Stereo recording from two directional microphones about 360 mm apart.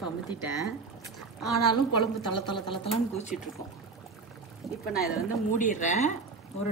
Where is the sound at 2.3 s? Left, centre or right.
Centre.